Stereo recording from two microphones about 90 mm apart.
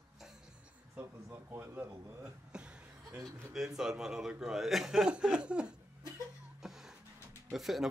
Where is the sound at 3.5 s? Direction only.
5° right (ahead or behind).